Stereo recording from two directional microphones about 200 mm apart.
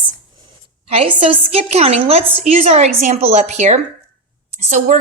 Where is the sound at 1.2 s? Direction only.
30° right (ahead or behind).